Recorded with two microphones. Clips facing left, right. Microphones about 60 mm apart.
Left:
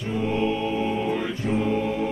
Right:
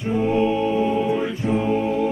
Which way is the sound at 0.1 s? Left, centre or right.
Right.